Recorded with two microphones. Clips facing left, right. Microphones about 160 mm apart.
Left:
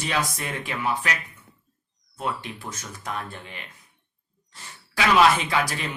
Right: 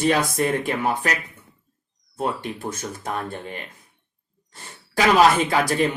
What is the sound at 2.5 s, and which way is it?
Speech, 30° right (ahead or behind).